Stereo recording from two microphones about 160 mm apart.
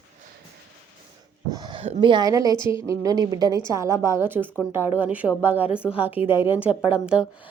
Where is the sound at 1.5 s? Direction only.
25° right (ahead or behind).